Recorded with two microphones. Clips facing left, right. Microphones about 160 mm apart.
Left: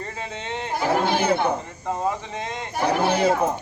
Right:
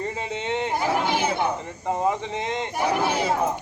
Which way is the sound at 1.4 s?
20° right (ahead or behind).